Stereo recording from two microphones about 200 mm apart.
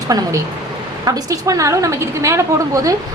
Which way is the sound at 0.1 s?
20° right (ahead or behind).